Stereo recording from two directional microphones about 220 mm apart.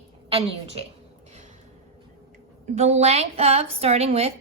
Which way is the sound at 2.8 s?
30° right (ahead or behind).